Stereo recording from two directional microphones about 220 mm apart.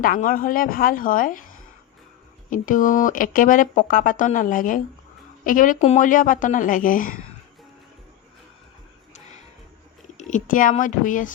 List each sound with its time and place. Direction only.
0.0 s speech: 40° left (ahead or behind)
2.5 s speech: 35° left (ahead or behind)
10.2 s speech: 35° left (ahead or behind)